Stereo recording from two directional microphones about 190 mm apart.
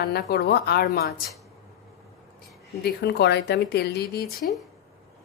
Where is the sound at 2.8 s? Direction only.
60° left (ahead or behind).